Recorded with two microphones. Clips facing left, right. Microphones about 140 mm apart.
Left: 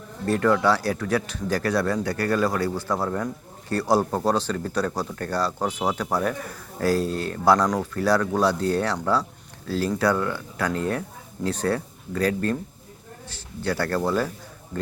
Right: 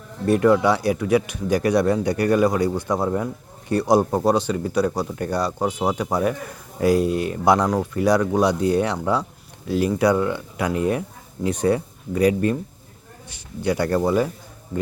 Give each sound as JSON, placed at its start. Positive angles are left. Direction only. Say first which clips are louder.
{"t": 0.3, "sound": "speech", "louder": "right 4 dB", "side_deg": -15}